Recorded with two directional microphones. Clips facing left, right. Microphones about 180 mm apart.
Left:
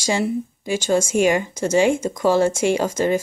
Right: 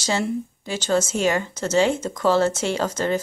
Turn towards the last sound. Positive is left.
turn(degrees=10)  # may be behind; listen again after turning